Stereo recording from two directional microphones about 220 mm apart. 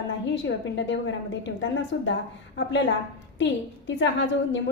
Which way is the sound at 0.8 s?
55° left (ahead or behind).